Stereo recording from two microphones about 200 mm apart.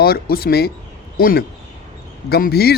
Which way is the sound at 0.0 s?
50° left (ahead or behind).